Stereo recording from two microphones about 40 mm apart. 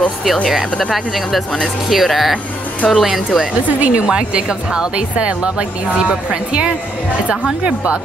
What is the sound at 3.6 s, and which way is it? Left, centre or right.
Speech, right.